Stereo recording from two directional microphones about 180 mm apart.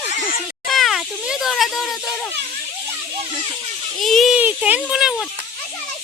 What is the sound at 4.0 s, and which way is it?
Speech, centre (ahead or behind).